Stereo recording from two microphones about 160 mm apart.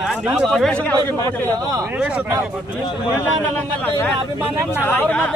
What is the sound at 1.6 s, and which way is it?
Speech, 20° right (ahead or behind).